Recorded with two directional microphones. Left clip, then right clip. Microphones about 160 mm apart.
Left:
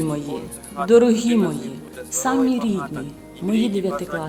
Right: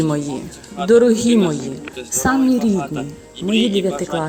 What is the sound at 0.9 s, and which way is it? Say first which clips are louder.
A man's voice: right 3 dB; 15° right (ahead or behind).